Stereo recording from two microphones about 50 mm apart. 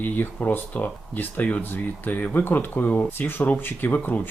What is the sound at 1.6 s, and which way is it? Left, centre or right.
Speech, left.